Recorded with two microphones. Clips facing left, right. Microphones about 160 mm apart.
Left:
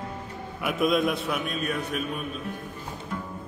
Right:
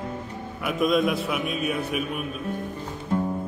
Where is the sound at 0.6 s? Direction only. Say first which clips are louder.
Right 2 dB; centre (ahead or behind).